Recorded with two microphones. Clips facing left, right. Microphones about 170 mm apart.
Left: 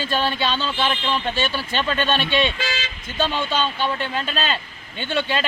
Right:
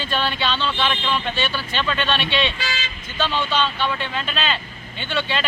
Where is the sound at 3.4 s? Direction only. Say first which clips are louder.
Right 1 dB; 45° left (ahead or behind).